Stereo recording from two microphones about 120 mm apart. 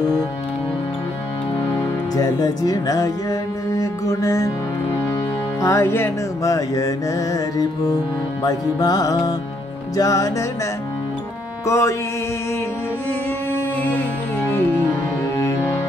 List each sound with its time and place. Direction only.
2.1 s speech: 30° left (ahead or behind)
5.6 s music: 25° left (ahead or behind)
11.6 s music: 25° left (ahead or behind)
13.5 s music: 15° left (ahead or behind)